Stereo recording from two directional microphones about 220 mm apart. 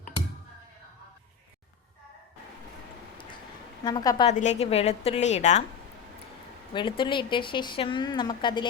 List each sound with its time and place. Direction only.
3.8 s a woman's voice: 15° left (ahead or behind)
4.3 s a woman's voice: 30° left (ahead or behind)
6.7 s speech: 20° left (ahead or behind)